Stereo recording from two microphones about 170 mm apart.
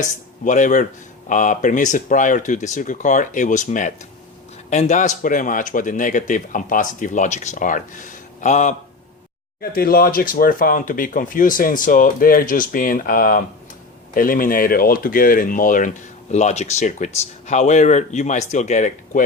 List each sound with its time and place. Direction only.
0.4 s speech: 50° left (ahead or behind)
9.6 s speech: 60° left (ahead or behind)
16.3 s speech: 40° left (ahead or behind)